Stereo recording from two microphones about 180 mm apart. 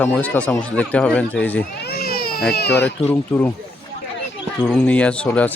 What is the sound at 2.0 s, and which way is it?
Baby cry, 55° left (ahead or behind).